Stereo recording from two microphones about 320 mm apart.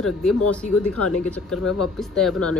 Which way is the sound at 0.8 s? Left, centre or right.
Left.